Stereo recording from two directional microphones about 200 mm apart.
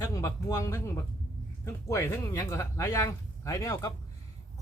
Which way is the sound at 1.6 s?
15° left (ahead or behind).